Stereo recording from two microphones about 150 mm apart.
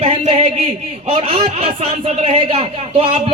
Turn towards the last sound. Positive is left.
turn(degrees=-40)  # may be behind; listen again after turning